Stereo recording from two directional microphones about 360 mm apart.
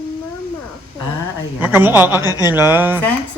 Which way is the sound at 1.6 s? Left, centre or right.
Centre.